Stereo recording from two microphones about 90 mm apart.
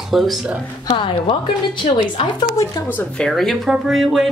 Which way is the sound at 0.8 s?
70° left (ahead or behind).